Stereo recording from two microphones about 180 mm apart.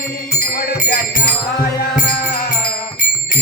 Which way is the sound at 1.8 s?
55° left (ahead or behind).